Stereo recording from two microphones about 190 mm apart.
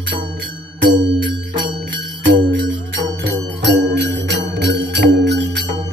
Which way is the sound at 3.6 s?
65° right (ahead or behind).